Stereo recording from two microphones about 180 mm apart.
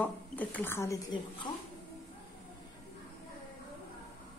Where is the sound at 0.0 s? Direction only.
10° left (ahead or behind).